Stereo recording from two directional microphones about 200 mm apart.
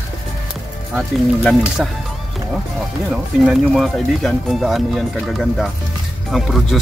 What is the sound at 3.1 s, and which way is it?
Speech, centre (ahead or behind).